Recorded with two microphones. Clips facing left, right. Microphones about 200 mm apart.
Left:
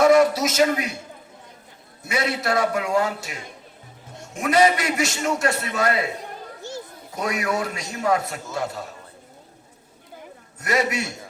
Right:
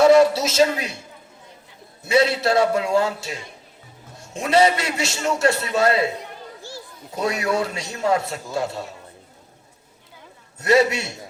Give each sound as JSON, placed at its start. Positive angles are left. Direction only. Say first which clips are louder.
{"t": 0.0, "sound": "a sound", "louder": "right 2 dB", "side_deg": -25}
{"t": 2.0, "sound": "a man's voice", "louder": "right 6 dB", "side_deg": -25}
{"t": 6.6, "sound": "children playing", "louder": "left 7 dB", "side_deg": 20}
{"t": 7.2, "sound": "a man's voice", "louder": "right 3 dB", "side_deg": -25}
{"t": 10.6, "sound": "a man's voice", "louder": "right 6 dB", "side_deg": -25}